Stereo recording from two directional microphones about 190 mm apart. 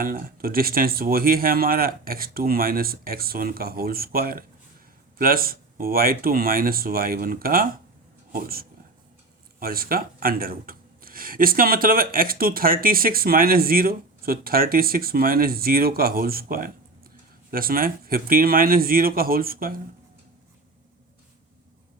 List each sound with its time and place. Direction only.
0.0 s speech: 50° right (ahead or behind)